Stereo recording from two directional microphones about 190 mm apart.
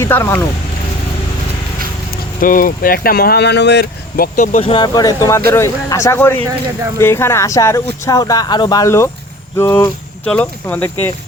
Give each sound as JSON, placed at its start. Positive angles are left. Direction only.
{"t": 0.0, "sound": "speech", "side_deg": 15}
{"t": 2.4, "sound": "speech", "side_deg": 45}
{"t": 4.4, "sound": "speech", "side_deg": 35}